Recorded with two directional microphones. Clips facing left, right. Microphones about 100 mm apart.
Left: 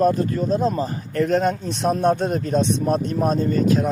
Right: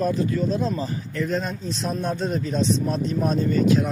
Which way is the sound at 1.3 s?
60° left (ahead or behind).